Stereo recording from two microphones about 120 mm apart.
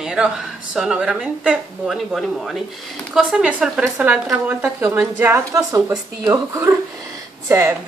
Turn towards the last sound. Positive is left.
turn(degrees=-25)  # may be behind; listen again after turning